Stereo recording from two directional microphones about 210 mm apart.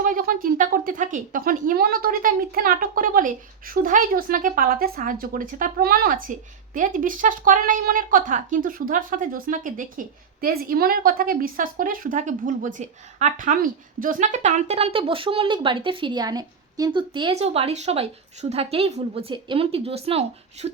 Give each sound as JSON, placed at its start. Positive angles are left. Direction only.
{"t": 0.0, "sound": "a woman's voice", "side_deg": -40}